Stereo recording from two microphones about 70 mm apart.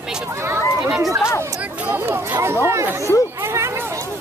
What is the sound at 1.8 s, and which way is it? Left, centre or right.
Speech, right.